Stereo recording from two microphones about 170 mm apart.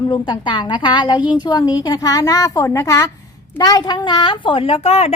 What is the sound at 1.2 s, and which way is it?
Speech, 10° right (ahead or behind).